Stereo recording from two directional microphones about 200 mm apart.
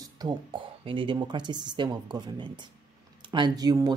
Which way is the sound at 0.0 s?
20° right (ahead or behind).